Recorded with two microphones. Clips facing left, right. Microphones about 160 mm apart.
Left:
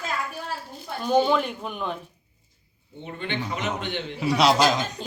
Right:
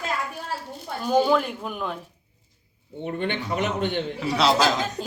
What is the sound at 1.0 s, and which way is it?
Speech, 5° right (ahead or behind).